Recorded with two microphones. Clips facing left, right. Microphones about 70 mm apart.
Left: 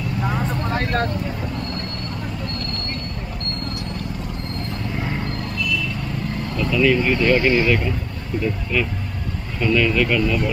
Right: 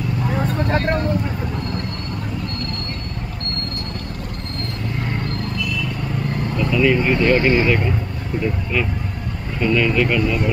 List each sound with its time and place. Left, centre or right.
6.5 s speech: centre
9.6 s speech: centre